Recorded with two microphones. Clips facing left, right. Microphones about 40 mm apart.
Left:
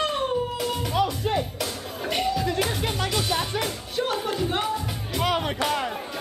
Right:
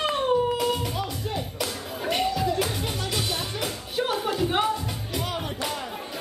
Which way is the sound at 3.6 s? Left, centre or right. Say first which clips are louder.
Even; centre.